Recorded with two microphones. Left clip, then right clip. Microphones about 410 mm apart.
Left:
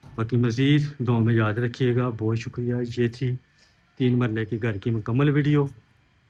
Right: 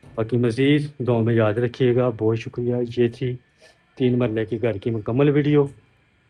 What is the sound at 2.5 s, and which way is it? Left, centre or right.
Speech, right.